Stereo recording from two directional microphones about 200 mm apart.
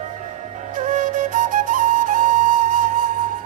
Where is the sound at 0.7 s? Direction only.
40° right (ahead or behind).